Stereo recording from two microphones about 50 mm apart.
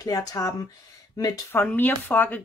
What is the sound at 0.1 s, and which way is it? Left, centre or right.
Speech, left.